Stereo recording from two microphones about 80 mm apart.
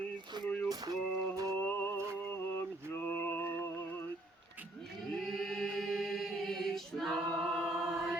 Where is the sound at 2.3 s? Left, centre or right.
Left.